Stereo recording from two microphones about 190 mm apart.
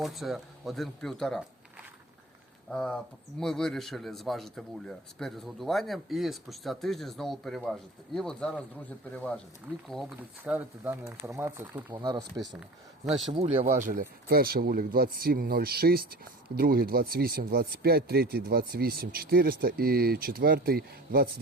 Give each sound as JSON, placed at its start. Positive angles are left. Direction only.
{"t": 0.0, "sound": "speech", "side_deg": 0}
{"t": 2.6, "sound": "speech", "side_deg": 0}
{"t": 9.9, "sound": "speech", "side_deg": -5}
{"t": 12.3, "sound": "speech", "side_deg": 0}
{"t": 13.3, "sound": "speech", "side_deg": -30}